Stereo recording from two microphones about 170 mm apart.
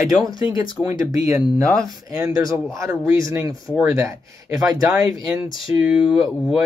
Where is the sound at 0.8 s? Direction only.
20° right (ahead or behind).